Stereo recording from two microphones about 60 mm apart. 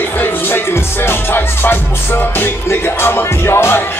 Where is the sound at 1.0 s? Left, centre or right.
Left.